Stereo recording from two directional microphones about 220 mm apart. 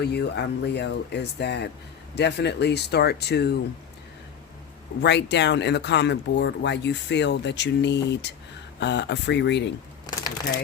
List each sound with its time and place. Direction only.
0.0 s speech: 50° left (ahead or behind)
5.0 s speech: 50° left (ahead or behind)